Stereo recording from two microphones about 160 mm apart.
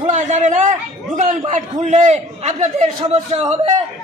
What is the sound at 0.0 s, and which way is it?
A man's voice, 45° right (ahead or behind).